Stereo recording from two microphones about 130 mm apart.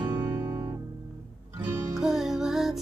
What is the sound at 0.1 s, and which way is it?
Music, 20° right (ahead or behind).